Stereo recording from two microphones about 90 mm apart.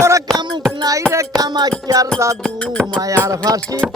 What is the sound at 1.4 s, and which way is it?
Music, 45° right (ahead or behind).